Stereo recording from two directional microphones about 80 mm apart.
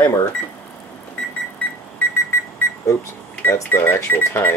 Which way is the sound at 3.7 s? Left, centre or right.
Left.